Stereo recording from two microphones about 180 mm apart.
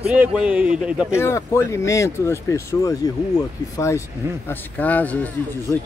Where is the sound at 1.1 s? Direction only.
15° left (ahead or behind).